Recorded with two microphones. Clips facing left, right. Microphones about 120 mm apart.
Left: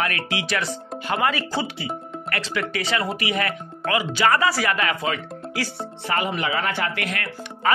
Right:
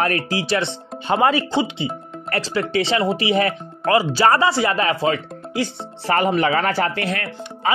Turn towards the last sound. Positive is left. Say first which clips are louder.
# right 1 dB
turn(degrees=-30)  # may be behind; listen again after turning